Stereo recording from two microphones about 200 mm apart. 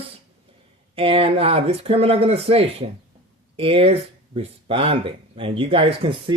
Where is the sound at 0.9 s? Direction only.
30° right (ahead or behind).